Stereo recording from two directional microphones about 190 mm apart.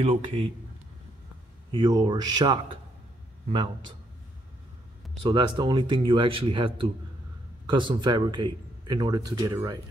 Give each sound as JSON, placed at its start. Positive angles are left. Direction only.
{"t": 0.0, "sound": "a man's voice", "side_deg": -30}
{"t": 1.7, "sound": "speech", "side_deg": -25}
{"t": 5.2, "sound": "speech", "side_deg": -25}